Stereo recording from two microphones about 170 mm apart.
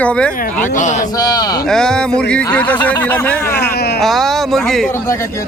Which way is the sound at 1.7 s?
5° left (ahead or behind).